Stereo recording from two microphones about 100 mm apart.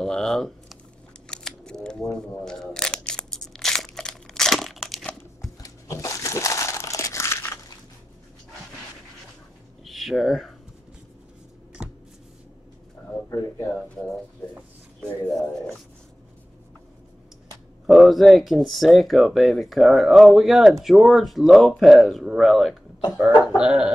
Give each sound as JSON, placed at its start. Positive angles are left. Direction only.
{"t": 0.0, "sound": "speech", "side_deg": 5}
{"t": 1.2, "sound": "a sound", "side_deg": 5}
{"t": 5.6, "sound": "crumpling", "side_deg": 35}
{"t": 9.8, "sound": "a sound", "side_deg": 0}
{"t": 13.3, "sound": "speech", "side_deg": 35}
{"t": 17.8, "sound": "speech", "side_deg": 0}
{"t": 23.1, "sound": "cough", "side_deg": -10}